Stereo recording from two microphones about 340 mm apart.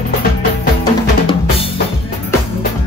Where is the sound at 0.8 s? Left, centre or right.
Centre.